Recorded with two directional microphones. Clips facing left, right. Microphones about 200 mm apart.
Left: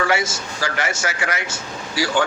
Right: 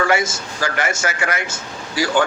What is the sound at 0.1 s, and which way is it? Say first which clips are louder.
Speech: right 2 dB; 50° right (ahead or behind).